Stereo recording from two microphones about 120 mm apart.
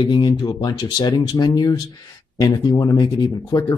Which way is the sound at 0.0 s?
40° left (ahead or behind).